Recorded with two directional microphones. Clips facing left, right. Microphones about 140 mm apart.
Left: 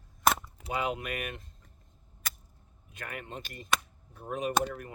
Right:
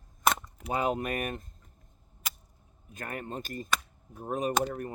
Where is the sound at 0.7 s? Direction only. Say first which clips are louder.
Right 3 dB; 40° right (ahead or behind).